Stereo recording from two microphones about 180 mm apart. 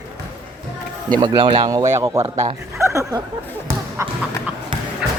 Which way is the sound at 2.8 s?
15° right (ahead or behind).